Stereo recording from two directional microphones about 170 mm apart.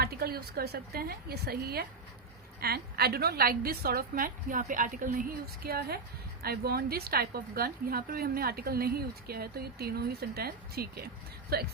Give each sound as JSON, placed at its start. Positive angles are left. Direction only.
{"t": 0.0, "sound": "a woman's voice", "side_deg": -65}
{"t": 5.6, "sound": "a woman's voice", "side_deg": -65}